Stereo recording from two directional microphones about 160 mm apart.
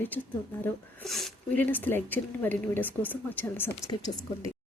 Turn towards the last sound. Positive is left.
turn(degrees=15)  # may be behind; listen again after turning